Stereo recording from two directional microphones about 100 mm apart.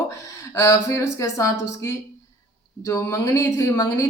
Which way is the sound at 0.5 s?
30° left (ahead or behind).